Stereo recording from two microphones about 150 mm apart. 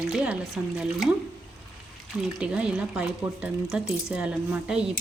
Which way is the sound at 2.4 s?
5° right (ahead or behind).